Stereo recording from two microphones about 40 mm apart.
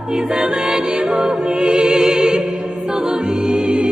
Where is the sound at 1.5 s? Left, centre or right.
Right.